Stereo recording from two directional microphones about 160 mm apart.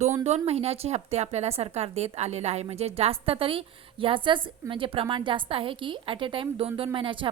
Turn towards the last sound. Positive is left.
turn(degrees=-30)  # may be behind; listen again after turning